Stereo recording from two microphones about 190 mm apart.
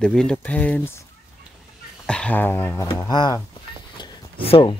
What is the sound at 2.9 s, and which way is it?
Speech, 20° left (ahead or behind).